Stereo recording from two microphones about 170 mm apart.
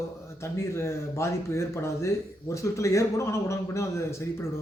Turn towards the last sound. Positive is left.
turn(degrees=15)  # may be behind; listen again after turning